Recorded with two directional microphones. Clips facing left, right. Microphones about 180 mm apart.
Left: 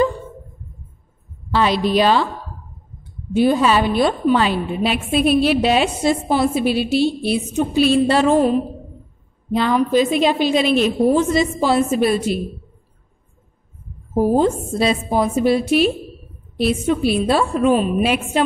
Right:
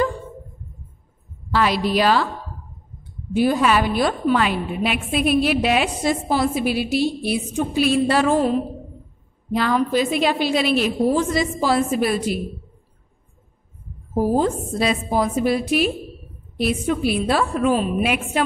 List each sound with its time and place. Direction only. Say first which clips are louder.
1.5 s a woman's voice: left 3 dB; 25° left (ahead or behind)
3.3 s a woman's voice: left 3 dB; 25° left (ahead or behind)
14.1 s a woman's voice: left 3 dB; 25° left (ahead or behind)